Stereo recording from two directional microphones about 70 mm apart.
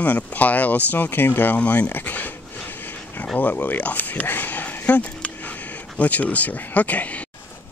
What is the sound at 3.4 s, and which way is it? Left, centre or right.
Speech, left.